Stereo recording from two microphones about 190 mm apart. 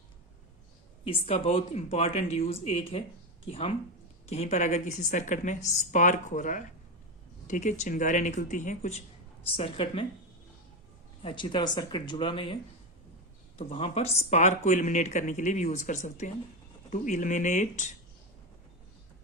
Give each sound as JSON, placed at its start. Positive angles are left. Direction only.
{"t": 1.0, "sound": "speech", "side_deg": 30}
{"t": 9.6, "sound": "speech", "side_deg": 30}
{"t": 11.2, "sound": "speech", "side_deg": 25}
{"t": 13.6, "sound": "speech", "side_deg": 30}